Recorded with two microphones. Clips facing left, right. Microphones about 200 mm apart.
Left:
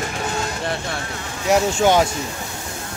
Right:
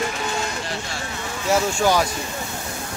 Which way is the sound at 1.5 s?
20° left (ahead or behind).